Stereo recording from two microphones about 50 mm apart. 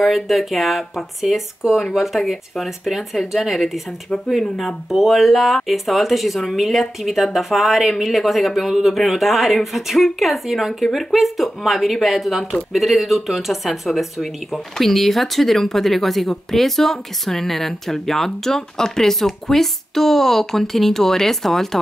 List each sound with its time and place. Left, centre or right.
0.0 s speech: centre